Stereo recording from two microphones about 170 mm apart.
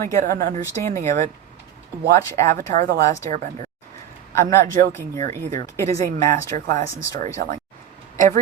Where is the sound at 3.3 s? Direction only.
45° right (ahead or behind).